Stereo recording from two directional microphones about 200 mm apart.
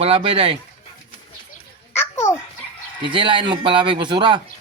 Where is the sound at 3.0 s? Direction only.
25° right (ahead or behind).